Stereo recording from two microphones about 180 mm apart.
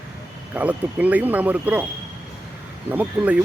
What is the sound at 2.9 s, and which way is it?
Speech, 10° right (ahead or behind).